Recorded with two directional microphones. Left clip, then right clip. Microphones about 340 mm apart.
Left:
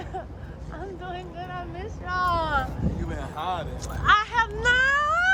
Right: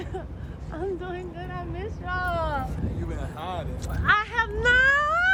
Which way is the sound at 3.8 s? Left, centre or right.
Centre.